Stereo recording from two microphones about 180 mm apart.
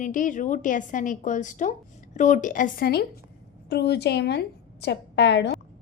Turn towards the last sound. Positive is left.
turn(degrees=70)  # may be behind; listen again after turning